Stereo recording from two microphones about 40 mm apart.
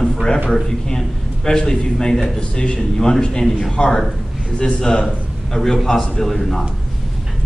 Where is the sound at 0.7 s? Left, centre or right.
Centre.